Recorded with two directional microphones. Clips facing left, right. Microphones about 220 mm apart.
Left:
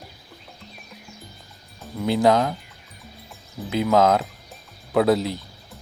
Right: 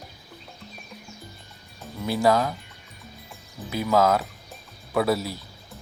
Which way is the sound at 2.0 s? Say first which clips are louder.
Left 3 dB; 20° left (ahead or behind).